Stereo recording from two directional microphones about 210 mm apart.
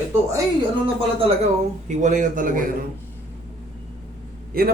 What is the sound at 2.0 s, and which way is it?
Speech, 35° right (ahead or behind).